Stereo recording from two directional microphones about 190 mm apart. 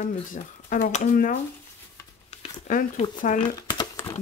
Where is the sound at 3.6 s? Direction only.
20° left (ahead or behind).